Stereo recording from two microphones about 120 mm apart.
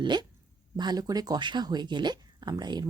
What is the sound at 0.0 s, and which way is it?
Speech, 40° right (ahead or behind).